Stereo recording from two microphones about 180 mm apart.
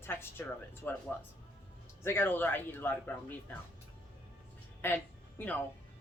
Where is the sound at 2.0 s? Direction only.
10° left (ahead or behind).